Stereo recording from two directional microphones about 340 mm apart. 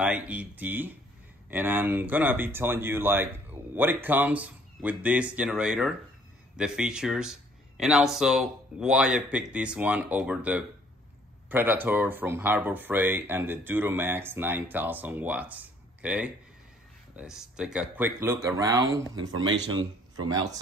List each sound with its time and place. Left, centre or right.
0.0 s speech: centre
19.3 s a man's voice: right